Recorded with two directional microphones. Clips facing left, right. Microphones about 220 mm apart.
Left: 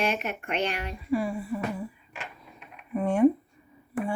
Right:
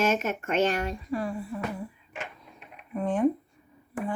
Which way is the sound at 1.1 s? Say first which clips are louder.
Left 3 dB; 5° left (ahead or behind).